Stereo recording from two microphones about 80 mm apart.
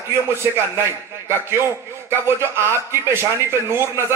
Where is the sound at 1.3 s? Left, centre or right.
Right.